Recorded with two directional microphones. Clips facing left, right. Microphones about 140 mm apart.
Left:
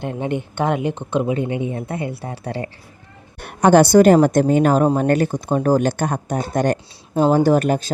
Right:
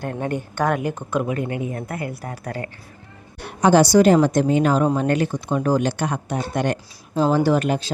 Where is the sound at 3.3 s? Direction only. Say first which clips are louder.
Left 3 dB; 55° left (ahead or behind).